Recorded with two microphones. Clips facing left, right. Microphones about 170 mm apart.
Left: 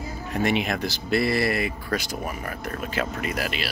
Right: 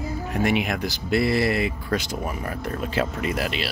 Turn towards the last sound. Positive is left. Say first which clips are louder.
# right 2 dB
turn(degrees=-25)  # may be behind; listen again after turning